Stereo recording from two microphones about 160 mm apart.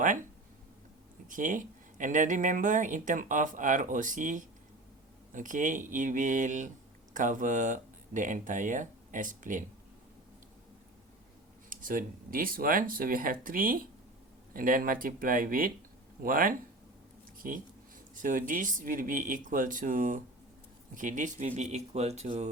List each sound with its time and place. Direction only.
1.3 s speech: 55° right (ahead or behind)
11.7 s speech: 60° right (ahead or behind)
17.3 s a sound: 60° right (ahead or behind)
18.1 s speech: 55° right (ahead or behind)